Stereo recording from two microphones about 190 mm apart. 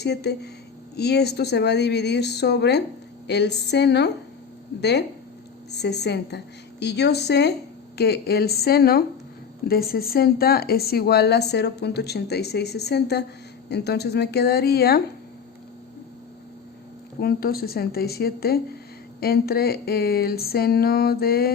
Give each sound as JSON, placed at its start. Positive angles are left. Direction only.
{"t": 0.0, "sound": "speech", "side_deg": 60}
{"t": 17.2, "sound": "speech", "side_deg": 55}